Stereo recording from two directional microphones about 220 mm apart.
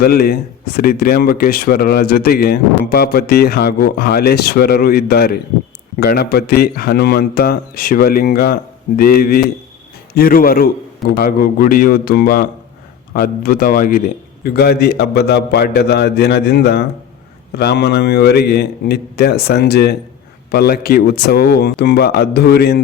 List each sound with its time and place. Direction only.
0.0 s a man's voice: 45° left (ahead or behind)